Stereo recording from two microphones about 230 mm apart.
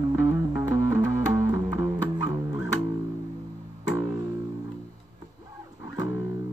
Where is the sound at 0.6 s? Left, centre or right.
Centre.